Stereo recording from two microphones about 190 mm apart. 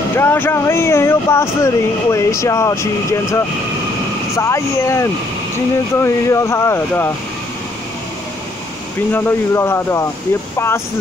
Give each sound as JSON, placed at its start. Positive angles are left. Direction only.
{"t": 0.2, "sound": "speech", "side_deg": 10}
{"t": 9.1, "sound": "speech", "side_deg": 10}